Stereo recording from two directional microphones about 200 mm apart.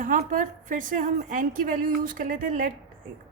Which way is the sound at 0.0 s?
40° right (ahead or behind).